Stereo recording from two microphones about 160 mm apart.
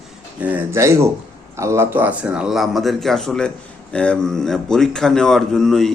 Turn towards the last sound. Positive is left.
turn(degrees=0)  # may be behind; listen again after turning